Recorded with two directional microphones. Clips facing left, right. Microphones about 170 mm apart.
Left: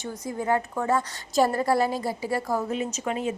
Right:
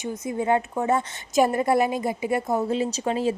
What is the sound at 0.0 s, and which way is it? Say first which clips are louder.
A woman's voice: right 4 dB; 20° right (ahead or behind).